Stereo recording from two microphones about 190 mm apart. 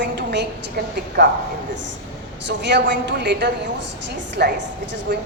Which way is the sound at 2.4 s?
65° right (ahead or behind).